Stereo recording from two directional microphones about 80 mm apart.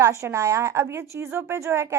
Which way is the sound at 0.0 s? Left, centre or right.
Right.